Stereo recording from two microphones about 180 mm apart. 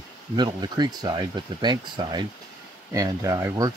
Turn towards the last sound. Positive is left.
turn(degrees=-20)  # may be behind; listen again after turning